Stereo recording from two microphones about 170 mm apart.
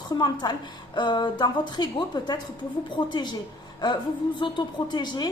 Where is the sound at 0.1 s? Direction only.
25° left (ahead or behind).